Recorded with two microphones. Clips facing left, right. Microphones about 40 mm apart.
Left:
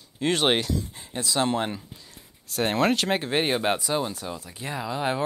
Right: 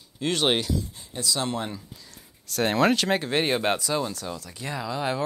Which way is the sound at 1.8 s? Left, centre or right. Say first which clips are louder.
Even; left.